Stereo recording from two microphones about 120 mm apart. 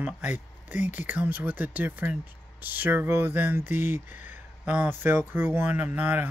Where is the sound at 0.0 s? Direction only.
15° right (ahead or behind).